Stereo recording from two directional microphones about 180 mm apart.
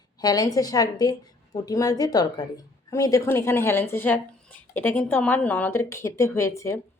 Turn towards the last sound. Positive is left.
turn(degrees=15)  # may be behind; listen again after turning